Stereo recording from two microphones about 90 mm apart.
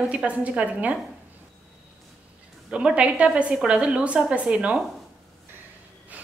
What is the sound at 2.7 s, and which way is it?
A woman's voice, 10° right (ahead or behind).